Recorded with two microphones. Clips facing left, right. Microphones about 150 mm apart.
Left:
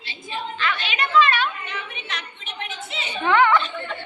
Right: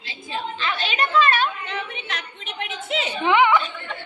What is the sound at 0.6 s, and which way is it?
Speech, 35° right (ahead or behind).